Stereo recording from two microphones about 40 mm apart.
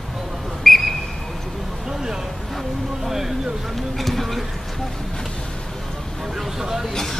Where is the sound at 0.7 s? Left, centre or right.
Centre.